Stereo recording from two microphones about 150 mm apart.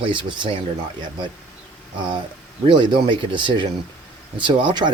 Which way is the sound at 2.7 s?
35° right (ahead or behind).